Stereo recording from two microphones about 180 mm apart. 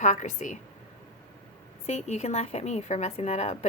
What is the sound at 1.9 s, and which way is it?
Speech, 35° left (ahead or behind).